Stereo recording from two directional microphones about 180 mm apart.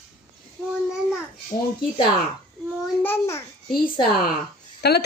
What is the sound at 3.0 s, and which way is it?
Babbling, 15° left (ahead or behind).